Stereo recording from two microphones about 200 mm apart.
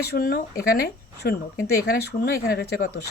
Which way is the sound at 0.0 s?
50° left (ahead or behind).